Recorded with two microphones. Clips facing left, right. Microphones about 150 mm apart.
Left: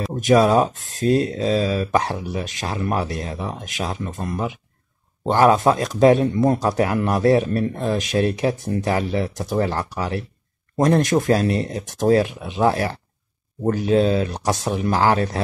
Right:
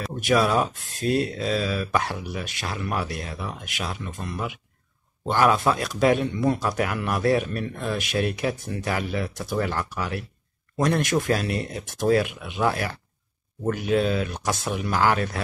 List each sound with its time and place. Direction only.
0.1 s speech: 35° left (ahead or behind)